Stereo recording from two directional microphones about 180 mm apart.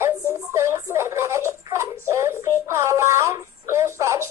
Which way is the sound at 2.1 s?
15° right (ahead or behind).